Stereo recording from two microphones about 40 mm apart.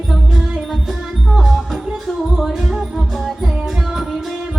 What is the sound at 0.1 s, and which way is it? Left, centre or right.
Music, centre.